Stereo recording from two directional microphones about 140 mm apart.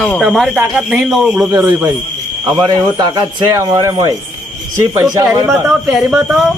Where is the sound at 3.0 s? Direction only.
30° right (ahead or behind).